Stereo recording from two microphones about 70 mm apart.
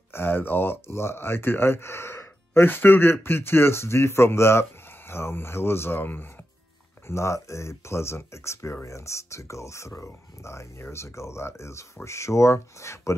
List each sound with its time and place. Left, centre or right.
0.1 s speech: left
7.1 s speech: left